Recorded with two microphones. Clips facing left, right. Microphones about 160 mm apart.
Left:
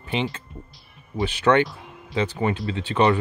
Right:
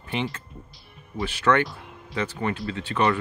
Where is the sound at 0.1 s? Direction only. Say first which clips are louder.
Left 3 dB; 20° left (ahead or behind).